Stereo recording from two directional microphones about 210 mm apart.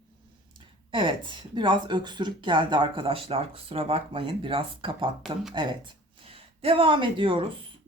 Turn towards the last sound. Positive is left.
turn(degrees=-25)  # may be behind; listen again after turning